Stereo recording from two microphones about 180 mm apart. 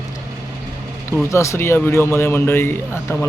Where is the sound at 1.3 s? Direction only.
15° left (ahead or behind).